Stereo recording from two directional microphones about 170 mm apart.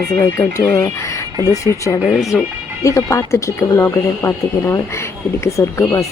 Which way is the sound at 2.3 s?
5° left (ahead or behind).